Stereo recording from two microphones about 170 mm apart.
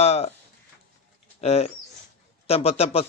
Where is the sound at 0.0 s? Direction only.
40° left (ahead or behind).